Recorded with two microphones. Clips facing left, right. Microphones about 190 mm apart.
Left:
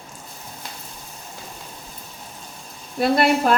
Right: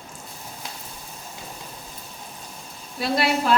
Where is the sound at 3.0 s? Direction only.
50° left (ahead or behind).